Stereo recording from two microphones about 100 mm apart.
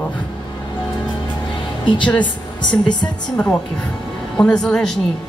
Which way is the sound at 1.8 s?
55° left (ahead or behind).